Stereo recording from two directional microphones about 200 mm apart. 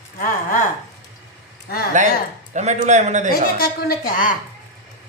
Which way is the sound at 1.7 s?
50° left (ahead or behind).